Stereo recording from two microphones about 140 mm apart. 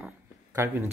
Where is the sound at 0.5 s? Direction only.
20° right (ahead or behind).